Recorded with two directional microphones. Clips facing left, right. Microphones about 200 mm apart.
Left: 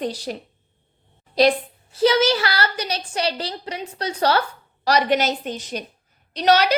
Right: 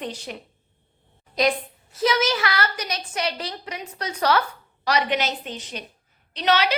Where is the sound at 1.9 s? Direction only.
30° left (ahead or behind).